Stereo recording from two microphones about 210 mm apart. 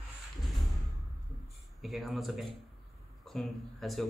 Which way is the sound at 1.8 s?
Centre (ahead or behind).